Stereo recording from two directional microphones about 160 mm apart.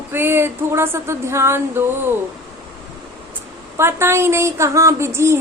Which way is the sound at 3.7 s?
15° right (ahead or behind).